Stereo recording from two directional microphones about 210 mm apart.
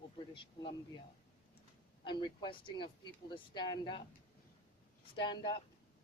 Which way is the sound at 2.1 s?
20° left (ahead or behind).